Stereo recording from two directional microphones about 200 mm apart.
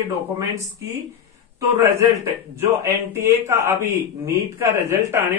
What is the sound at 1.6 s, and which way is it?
Speech, 15° right (ahead or behind).